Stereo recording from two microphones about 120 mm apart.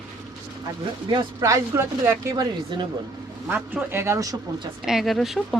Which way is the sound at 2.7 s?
40° right (ahead or behind).